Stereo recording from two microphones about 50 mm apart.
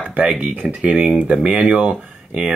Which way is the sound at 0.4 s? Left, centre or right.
Right.